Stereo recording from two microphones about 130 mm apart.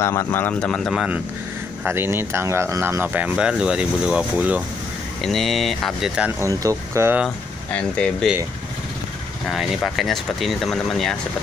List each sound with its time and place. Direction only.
0.0 s speech: 20° left (ahead or behind); by 1.0 s 5° left (ahead or behind)
1.9 s speech: 20° right (ahead or behind)
5.2 s speech: centre (ahead or behind)
6.4 s speech: 25° right (ahead or behind)
7.2 s speech: 5° left (ahead or behind)
9.5 s speech: centre (ahead or behind)